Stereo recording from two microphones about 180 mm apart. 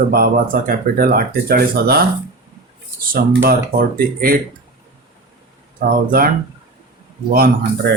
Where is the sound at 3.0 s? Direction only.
55° right (ahead or behind).